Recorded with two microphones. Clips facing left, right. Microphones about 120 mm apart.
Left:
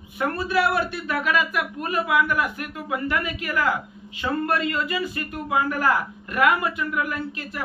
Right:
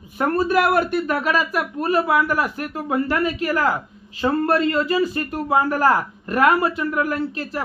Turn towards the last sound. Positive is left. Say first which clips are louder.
# right 6 dB
turn(degrees=-35)  # may be behind; listen again after turning